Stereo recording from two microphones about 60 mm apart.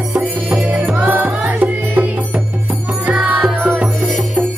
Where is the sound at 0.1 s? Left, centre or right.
Right.